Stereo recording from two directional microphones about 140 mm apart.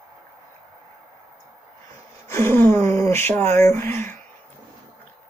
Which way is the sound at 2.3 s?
15° left (ahead or behind).